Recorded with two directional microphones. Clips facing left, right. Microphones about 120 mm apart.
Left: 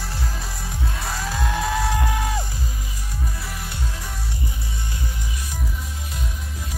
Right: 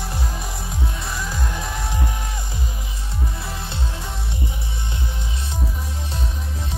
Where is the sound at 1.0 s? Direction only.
70° left (ahead or behind).